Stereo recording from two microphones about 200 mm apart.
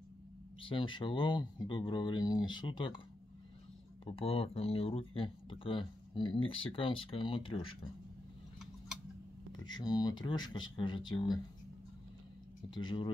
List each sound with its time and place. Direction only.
0.6 s speech: 25° left (ahead or behind)
4.0 s speech: 30° left (ahead or behind)
9.5 s speech: 20° left (ahead or behind)
12.7 s speech: 25° left (ahead or behind)